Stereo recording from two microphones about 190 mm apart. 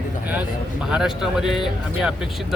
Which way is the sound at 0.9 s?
5° right (ahead or behind).